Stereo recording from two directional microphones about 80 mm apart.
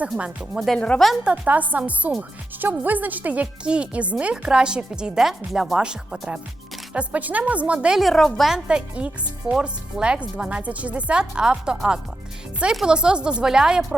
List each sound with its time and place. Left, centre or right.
0.2 s speech: centre
0.7 s speech: centre
1.2 s a woman's voice: centre
8.5 s speech: centre